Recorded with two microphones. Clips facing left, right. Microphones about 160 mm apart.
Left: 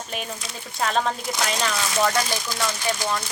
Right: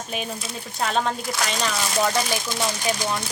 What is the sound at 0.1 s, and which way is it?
Speech, centre (ahead or behind).